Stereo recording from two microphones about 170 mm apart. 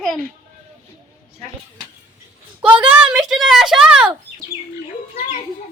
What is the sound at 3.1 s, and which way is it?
Speech, centre (ahead or behind).